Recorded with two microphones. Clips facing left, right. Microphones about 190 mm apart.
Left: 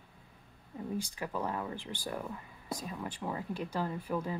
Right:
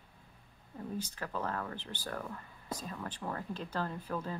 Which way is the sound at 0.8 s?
10° left (ahead or behind).